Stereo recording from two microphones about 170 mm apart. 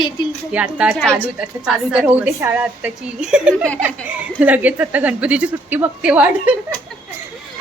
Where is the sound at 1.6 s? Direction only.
5° right (ahead or behind).